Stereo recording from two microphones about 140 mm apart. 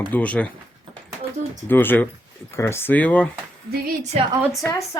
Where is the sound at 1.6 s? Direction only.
15° left (ahead or behind).